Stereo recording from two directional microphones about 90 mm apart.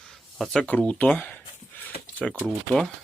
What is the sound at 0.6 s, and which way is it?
Speech, 15° left (ahead or behind).